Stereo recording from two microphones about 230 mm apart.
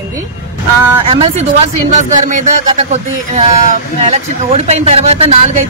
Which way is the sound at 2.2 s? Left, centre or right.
Right.